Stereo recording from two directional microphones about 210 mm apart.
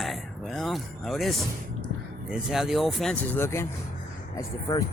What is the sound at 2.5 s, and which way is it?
Speech, centre (ahead or behind).